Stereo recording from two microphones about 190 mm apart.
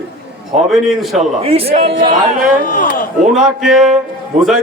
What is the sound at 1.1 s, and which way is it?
Speech, 30° right (ahead or behind).